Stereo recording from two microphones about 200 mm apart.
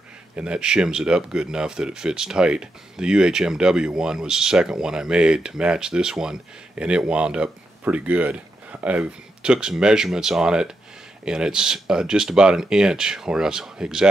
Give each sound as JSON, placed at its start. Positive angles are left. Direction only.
{"t": 0.4, "sound": "speech", "side_deg": -5}